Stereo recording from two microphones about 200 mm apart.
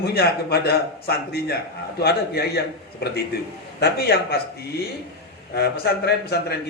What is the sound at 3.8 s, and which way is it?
Speech, 50° left (ahead or behind).